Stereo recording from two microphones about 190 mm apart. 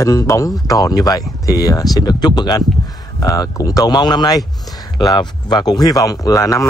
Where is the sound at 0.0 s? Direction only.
15° left (ahead or behind).